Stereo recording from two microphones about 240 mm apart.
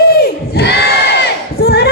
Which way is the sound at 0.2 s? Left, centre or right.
Left.